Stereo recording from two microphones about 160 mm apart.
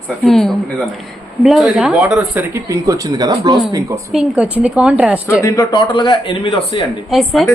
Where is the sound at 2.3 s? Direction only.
20° right (ahead or behind).